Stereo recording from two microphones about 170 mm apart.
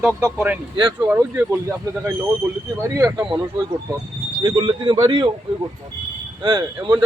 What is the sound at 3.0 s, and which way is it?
Speech, 15° right (ahead or behind).